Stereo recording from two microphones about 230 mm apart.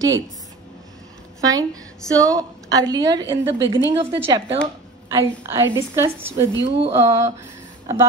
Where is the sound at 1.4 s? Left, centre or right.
Centre.